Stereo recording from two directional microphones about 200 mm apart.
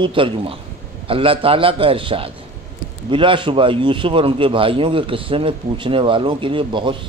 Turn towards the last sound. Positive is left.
turn(degrees=-25)  # may be behind; listen again after turning